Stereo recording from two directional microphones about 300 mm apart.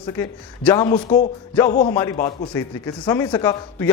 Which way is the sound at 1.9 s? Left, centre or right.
Centre.